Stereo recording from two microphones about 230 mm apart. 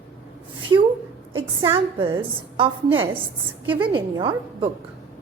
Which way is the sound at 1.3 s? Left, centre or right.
Right.